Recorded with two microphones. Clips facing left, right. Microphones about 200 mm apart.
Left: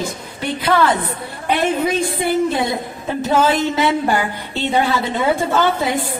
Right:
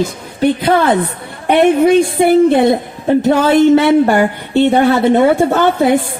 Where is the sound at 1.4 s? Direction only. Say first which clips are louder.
Right 9 dB; 60° right (ahead or behind).